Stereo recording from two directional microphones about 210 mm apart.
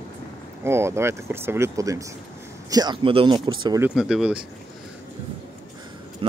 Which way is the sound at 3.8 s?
5° right (ahead or behind).